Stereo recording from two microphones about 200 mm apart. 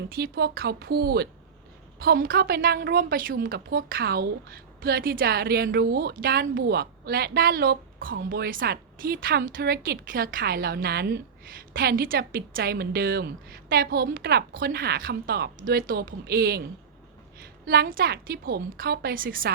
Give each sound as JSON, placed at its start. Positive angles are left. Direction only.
{"t": 0.1, "sound": "a woman's voice", "side_deg": -50}
{"t": 17.4, "sound": "a sound", "side_deg": -50}
{"t": 17.9, "sound": "a woman's voice", "side_deg": -50}